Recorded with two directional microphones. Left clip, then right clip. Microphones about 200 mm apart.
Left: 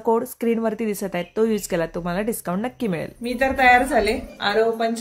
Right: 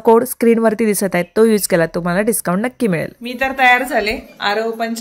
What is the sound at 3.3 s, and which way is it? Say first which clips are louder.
Speech: right 3 dB; 5° left (ahead or behind).